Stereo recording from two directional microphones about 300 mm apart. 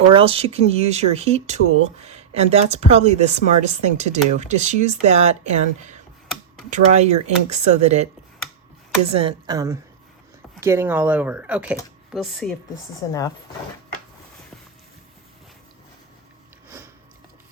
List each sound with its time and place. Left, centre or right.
0.1 s speech: centre
9.0 s speech: centre